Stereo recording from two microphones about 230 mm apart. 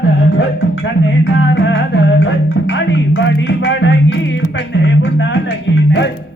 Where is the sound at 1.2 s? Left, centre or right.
Left.